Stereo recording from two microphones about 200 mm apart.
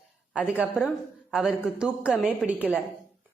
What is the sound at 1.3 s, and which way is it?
A woman's voice, 5° right (ahead or behind).